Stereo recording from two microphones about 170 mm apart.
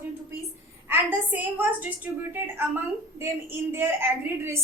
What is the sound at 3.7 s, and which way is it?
Speech, 15° right (ahead or behind).